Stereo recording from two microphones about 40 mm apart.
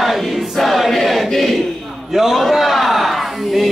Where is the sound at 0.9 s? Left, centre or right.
Centre.